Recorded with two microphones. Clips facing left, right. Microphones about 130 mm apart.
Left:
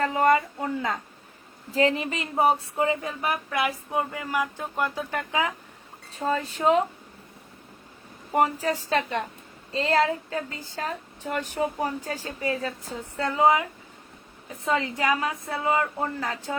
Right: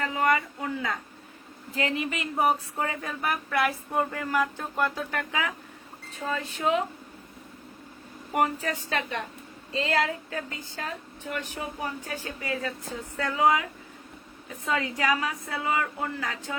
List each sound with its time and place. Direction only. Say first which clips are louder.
0.0 s a woman's voice: left 4 dB; 35° left (ahead or behind)
2.7 s a sound: left 5 dB; 20° left (ahead or behind)
6.1 s a woman's voice: left 5 dB; 35° left (ahead or behind)
8.3 s a woman's voice: left 3 dB; 30° left (ahead or behind)